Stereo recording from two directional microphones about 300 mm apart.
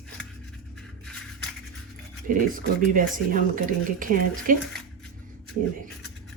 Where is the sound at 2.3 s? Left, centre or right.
Right.